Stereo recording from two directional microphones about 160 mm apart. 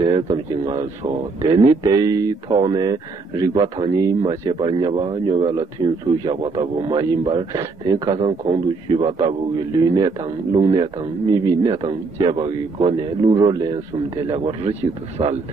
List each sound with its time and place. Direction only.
0.0 s a man's voice: 30° right (ahead or behind)
14.2 s a man's voice: 35° right (ahead or behind)